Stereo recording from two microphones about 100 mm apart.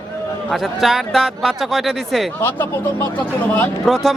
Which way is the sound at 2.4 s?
20° left (ahead or behind).